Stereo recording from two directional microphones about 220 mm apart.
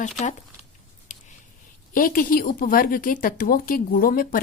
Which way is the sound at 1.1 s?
35° left (ahead or behind).